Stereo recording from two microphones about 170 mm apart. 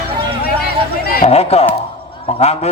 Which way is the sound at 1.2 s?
35° left (ahead or behind).